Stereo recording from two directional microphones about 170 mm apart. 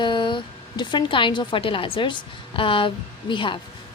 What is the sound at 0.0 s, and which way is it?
A woman's voice, 25° left (ahead or behind).